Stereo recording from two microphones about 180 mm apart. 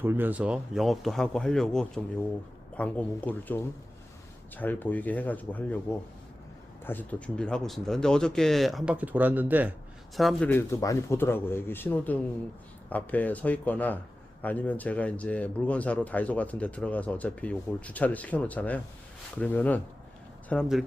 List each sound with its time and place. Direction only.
0.0 s speech: 10° right (ahead or behind)
10.5 s speech: 15° left (ahead or behind)